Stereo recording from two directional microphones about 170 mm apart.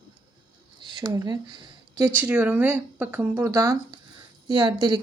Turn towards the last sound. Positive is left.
turn(degrees=-25)  # may be behind; listen again after turning